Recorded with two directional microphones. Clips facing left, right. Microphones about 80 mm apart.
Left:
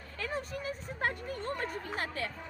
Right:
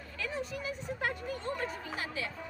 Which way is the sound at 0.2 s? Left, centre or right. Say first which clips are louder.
Even; left.